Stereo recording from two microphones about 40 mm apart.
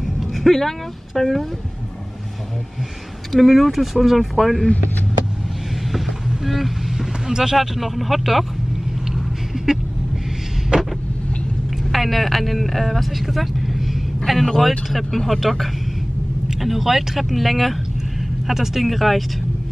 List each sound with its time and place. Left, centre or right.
0.0 s a sound: centre
3.3 s speech: centre
5.9 s vehicle: centre
7.5 s speech: centre
10.7 s vehicle: right
11.9 s speech: centre